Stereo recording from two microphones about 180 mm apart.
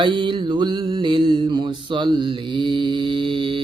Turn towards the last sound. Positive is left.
turn(degrees=-30)  # may be behind; listen again after turning